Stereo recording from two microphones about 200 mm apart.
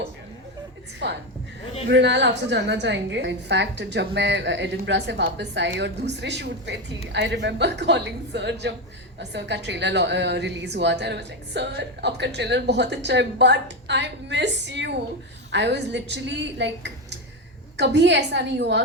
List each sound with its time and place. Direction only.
0.9 s a woman's voice: 60° right (ahead or behind)